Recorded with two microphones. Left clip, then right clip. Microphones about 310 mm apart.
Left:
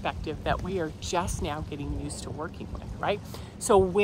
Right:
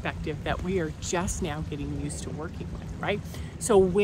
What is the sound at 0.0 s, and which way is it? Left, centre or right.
Speech, centre.